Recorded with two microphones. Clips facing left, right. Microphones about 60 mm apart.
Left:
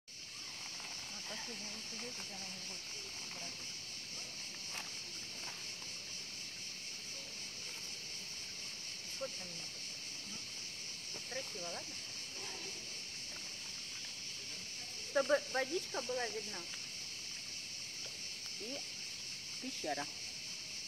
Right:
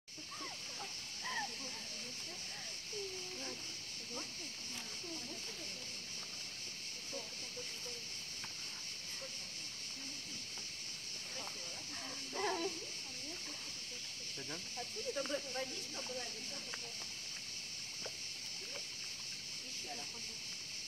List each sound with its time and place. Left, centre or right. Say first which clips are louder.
12.4 s dog: right 14 dB; right
15.1 s speech: left 10 dB; left
19.8 s speech: left 10 dB; left